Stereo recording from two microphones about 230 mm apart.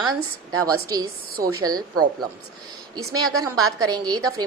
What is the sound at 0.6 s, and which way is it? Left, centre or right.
A woman's voice, centre.